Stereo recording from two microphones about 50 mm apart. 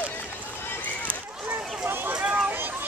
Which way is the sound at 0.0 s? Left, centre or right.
Left.